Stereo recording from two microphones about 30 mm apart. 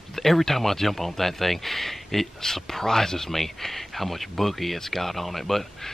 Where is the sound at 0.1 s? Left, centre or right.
Centre.